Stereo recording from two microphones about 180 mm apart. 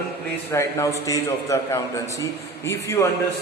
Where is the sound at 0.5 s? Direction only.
15° left (ahead or behind).